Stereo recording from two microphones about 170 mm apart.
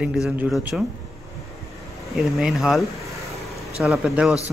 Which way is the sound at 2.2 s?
Centre (ahead or behind).